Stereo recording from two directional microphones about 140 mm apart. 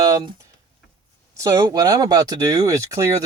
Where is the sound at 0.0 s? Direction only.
25° right (ahead or behind).